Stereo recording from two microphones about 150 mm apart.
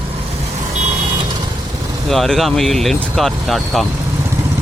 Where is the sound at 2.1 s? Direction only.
Centre (ahead or behind).